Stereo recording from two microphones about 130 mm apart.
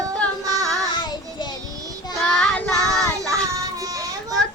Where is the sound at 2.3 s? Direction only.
5° left (ahead or behind).